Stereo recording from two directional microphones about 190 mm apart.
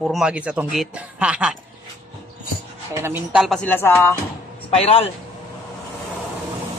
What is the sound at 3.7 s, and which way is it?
Speech, 10° left (ahead or behind).